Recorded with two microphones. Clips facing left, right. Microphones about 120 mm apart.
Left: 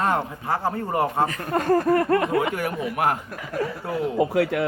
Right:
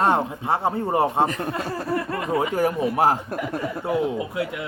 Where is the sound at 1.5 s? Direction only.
50° left (ahead or behind).